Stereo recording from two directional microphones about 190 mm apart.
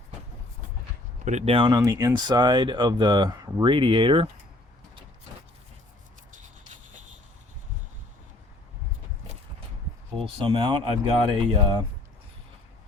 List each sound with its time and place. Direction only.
1.2 s speech: 40° right (ahead or behind)
10.4 s speech: 25° right (ahead or behind)